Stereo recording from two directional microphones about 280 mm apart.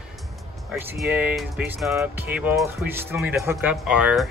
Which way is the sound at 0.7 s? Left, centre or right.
Centre.